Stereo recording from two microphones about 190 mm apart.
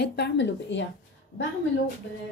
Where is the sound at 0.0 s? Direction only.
60° left (ahead or behind).